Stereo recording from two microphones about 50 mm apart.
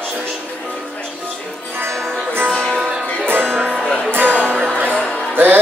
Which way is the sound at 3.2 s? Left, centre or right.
Right.